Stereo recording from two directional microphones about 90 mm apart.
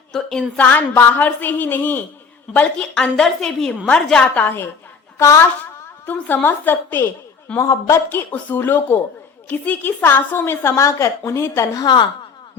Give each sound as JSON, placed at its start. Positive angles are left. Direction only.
{"t": 0.1, "sound": "a sound", "side_deg": 5}
{"t": 0.5, "sound": "a woman's voice", "side_deg": 20}
{"t": 6.1, "sound": "a woman's voice", "side_deg": 20}
{"t": 7.6, "sound": "a woman's voice", "side_deg": 35}
{"t": 8.1, "sound": "a woman's voice", "side_deg": 20}
{"t": 11.8, "sound": "a woman's voice", "side_deg": 55}